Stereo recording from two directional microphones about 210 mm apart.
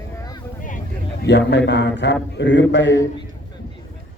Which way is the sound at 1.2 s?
55° left (ahead or behind).